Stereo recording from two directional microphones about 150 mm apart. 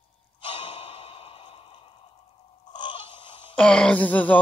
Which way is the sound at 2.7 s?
30° left (ahead or behind).